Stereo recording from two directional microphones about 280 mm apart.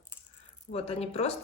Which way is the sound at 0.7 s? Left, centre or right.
Left.